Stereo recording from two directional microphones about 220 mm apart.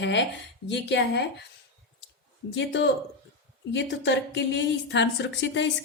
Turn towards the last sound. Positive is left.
turn(degrees=55)  # may be behind; listen again after turning